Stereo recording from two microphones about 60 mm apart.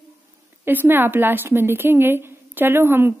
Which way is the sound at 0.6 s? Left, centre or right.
Right.